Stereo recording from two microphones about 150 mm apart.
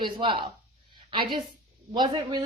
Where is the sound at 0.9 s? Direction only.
30° right (ahead or behind).